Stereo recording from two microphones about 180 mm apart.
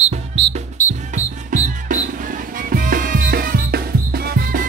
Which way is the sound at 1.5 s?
45° right (ahead or behind).